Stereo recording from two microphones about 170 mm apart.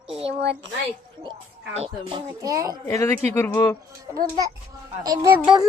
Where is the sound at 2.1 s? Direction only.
20° right (ahead or behind).